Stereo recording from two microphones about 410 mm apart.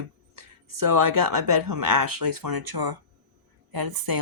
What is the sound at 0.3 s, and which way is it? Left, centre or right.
Speech, right.